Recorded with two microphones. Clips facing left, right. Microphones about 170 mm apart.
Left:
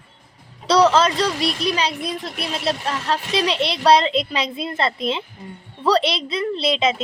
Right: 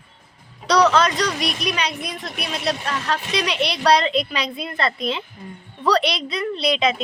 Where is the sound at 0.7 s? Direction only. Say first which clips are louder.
Left 1 dB; 30° left (ahead or behind).